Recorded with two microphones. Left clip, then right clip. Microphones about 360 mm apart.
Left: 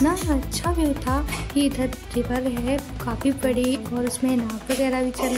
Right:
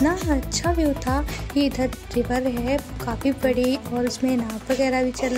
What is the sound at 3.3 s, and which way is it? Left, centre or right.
Speech, left.